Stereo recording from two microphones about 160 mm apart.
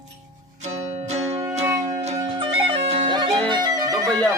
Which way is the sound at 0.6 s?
45° right (ahead or behind).